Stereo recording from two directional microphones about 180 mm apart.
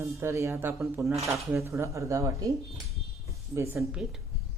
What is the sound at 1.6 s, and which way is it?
Speech, 15° right (ahead or behind).